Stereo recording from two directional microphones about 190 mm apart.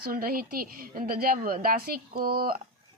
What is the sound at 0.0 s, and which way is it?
A woman's voice, 50° right (ahead or behind).